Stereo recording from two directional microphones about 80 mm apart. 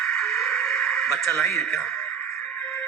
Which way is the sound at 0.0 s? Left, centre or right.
Centre.